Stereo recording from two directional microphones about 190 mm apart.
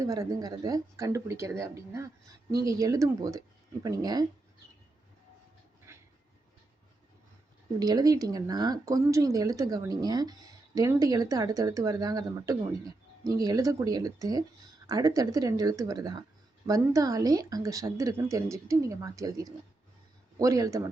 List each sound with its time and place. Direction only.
0.0 s speech: 20° right (ahead or behind)
5.9 s a sound: 15° right (ahead or behind)
7.8 s speech: 20° right (ahead or behind)